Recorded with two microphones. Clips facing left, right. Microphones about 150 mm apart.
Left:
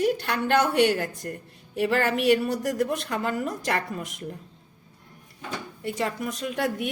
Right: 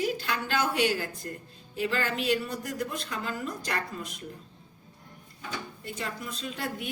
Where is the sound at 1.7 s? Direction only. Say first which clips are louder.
Left 6 dB; 70° left (ahead or behind).